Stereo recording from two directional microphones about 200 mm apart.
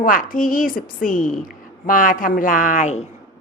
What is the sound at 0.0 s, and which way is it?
A woman's voice, 45° left (ahead or behind).